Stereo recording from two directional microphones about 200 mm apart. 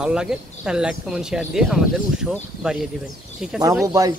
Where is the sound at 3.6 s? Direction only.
20° right (ahead or behind).